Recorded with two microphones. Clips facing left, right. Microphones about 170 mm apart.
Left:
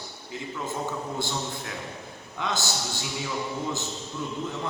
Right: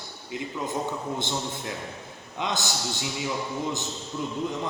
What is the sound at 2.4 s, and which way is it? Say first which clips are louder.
Speech: right 1 dB; 20° right (ahead or behind).